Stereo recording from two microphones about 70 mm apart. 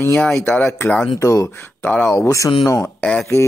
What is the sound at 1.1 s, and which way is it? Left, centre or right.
Speech, left.